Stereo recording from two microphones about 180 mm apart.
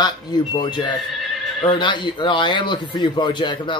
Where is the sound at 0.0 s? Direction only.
25° left (ahead or behind).